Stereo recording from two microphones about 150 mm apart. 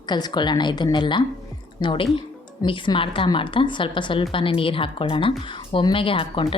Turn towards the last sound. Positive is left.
turn(degrees=35)  # may be behind; listen again after turning